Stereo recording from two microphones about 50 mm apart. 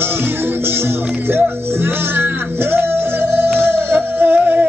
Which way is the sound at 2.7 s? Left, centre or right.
Right.